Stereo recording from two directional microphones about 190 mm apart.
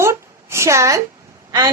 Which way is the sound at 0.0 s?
15° right (ahead or behind).